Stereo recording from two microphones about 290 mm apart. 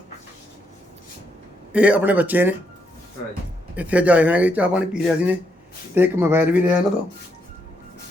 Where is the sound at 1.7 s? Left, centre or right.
Centre.